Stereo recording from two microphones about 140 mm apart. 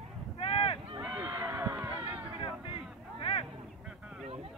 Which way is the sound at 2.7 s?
40° left (ahead or behind).